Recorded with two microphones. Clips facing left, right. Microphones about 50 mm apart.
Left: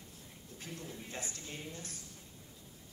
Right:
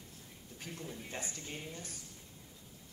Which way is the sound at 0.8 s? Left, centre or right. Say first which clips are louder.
Right 2 dB; right.